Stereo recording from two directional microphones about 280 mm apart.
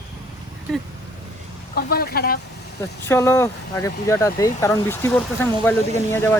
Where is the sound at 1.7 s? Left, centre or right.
Left.